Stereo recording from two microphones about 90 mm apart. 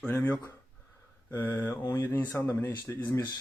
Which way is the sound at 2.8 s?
35° left (ahead or behind).